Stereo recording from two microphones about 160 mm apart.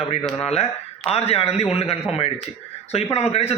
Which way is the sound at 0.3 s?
40° left (ahead or behind).